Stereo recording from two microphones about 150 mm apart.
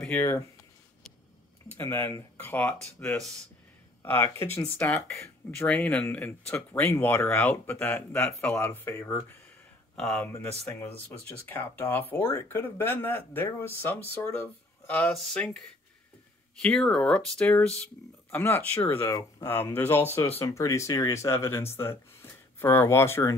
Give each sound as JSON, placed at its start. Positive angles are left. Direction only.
{"t": 0.0, "sound": "speech", "side_deg": 10}
{"t": 1.8, "sound": "speech", "side_deg": 15}
{"t": 10.7, "sound": "speech", "side_deg": 15}
{"t": 16.6, "sound": "speech", "side_deg": 5}